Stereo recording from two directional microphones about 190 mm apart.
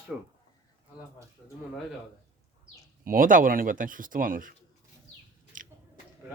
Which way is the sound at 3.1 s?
45° right (ahead or behind).